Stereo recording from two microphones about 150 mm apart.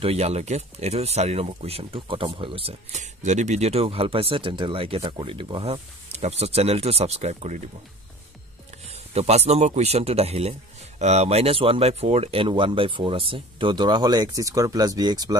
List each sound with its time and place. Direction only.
0.0 s speech: 45° right (ahead or behind)
8.8 s speech: 45° right (ahead or behind); by 15.3 s 25° right (ahead or behind)